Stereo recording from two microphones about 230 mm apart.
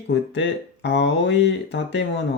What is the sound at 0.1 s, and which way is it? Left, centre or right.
Speech, left.